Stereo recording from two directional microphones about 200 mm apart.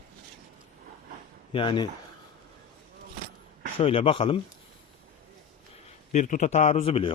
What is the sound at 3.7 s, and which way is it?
Speech, 30° left (ahead or behind).